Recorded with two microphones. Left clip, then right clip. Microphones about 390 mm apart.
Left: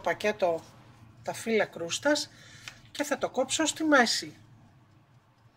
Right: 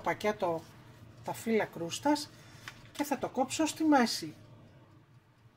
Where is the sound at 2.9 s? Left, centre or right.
Left.